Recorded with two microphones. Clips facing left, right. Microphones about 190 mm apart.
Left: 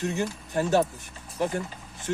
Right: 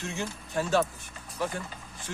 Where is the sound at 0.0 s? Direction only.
45° left (ahead or behind).